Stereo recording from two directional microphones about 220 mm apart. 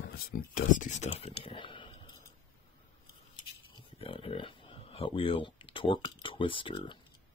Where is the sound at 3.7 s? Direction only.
25° left (ahead or behind).